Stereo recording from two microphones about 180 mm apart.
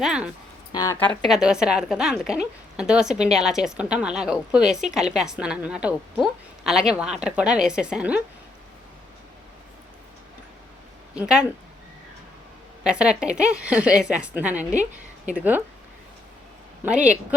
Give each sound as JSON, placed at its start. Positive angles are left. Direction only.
{"t": 0.0, "sound": "a woman's voice", "side_deg": -5}
{"t": 0.7, "sound": "speech", "side_deg": 20}
{"t": 0.9, "sound": "a woman's voice", "side_deg": 10}
{"t": 11.1, "sound": "speech", "side_deg": -5}
{"t": 12.8, "sound": "a woman's voice", "side_deg": -5}